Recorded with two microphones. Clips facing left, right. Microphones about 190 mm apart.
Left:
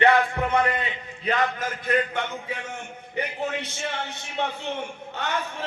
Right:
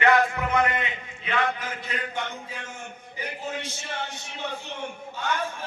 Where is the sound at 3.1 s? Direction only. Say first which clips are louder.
Left 5 dB; 65° left (ahead or behind).